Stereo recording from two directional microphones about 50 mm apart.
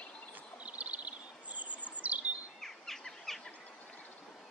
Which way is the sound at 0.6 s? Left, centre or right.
Right.